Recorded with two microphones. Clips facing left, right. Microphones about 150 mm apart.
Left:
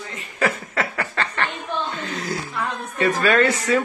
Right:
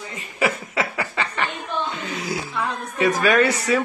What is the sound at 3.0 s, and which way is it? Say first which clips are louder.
Speech: even; 15° right (ahead or behind).